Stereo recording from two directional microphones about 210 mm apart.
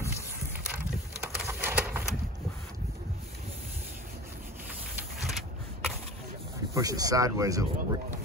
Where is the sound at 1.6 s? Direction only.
5° right (ahead or behind).